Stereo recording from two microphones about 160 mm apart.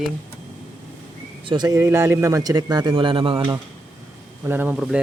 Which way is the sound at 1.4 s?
25° right (ahead or behind).